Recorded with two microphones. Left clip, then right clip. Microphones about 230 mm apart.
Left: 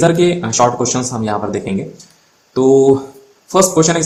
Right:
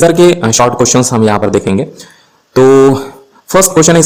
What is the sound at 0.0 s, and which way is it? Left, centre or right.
Speech, right.